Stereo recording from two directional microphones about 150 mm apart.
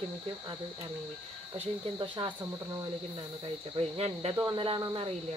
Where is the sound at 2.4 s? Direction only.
20° right (ahead or behind).